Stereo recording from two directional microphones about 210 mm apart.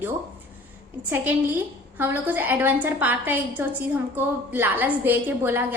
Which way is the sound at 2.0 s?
10° right (ahead or behind).